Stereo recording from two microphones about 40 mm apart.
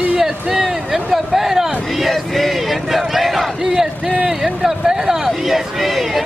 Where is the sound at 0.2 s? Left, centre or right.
Centre.